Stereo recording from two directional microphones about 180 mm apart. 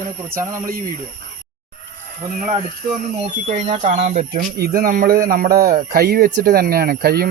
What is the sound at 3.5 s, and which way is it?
Speech, 35° right (ahead or behind).